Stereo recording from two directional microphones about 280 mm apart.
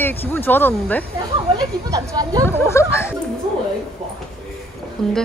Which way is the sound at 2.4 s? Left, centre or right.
Centre.